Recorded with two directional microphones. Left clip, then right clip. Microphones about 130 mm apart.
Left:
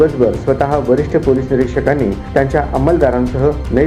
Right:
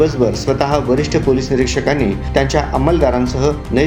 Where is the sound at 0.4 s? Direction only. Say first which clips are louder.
Left 2 dB; 30° right (ahead or behind).